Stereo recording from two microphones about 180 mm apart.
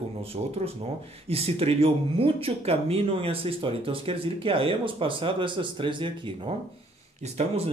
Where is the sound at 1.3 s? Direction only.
35° right (ahead or behind).